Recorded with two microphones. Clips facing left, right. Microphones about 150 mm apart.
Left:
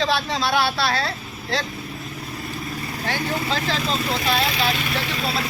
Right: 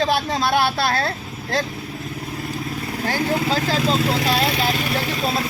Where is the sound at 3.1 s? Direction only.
40° right (ahead or behind).